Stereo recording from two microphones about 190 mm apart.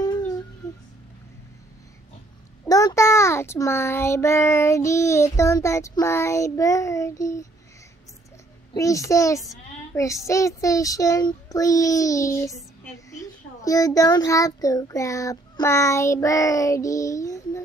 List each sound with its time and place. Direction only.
2.7 s child singing: 15° left (ahead or behind)
8.7 s child singing: 15° left (ahead or behind)
13.1 s a child's voice: 15° left (ahead or behind)